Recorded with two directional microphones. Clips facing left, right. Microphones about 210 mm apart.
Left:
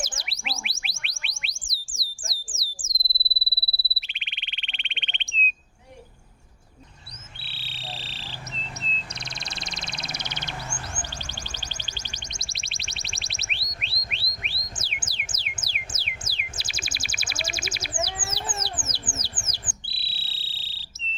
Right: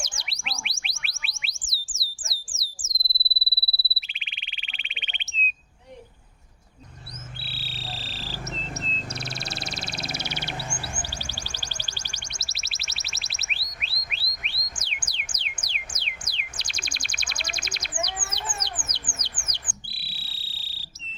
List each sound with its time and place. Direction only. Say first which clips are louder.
0.0 s chirp tone: left 4 dB; centre (ahead or behind)
2.6 s a sound: left 2 dB; centre (ahead or behind)
3.7 s frog: even; centre (ahead or behind)
7.4 s frog: left 1 dB; centre (ahead or behind)
8.5 s a sound: right 5 dB; 45° right (ahead or behind)
9.3 s bird: right 4 dB; 5° right (ahead or behind)
10.9 s music: right 1 dB; 10° right (ahead or behind); by 17.9 s 5° left (ahead or behind)
18.3 s bird: left 2 dB; 30° left (ahead or behind)
18.6 s a sound: left 3 dB; 5° left (ahead or behind)
19.9 s insect: even; 25° left (ahead or behind)